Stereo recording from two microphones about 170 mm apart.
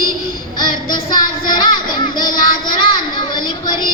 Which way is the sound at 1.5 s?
25° left (ahead or behind).